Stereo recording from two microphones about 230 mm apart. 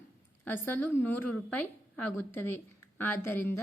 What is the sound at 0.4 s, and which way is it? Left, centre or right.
A woman's voice, centre.